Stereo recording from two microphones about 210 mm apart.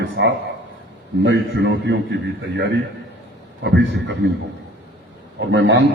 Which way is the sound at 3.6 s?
55° right (ahead or behind).